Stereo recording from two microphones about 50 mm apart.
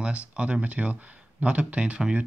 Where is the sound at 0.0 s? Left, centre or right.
Right.